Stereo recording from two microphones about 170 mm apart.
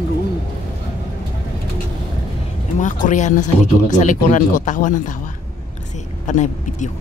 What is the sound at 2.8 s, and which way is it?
Speech, 50° left (ahead or behind).